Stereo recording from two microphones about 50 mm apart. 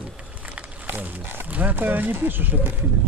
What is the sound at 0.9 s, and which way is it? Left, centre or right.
Speech, right.